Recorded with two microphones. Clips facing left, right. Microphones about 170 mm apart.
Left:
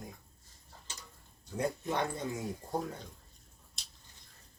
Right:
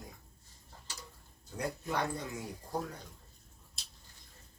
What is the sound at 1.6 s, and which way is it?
Speech, 20° left (ahead or behind).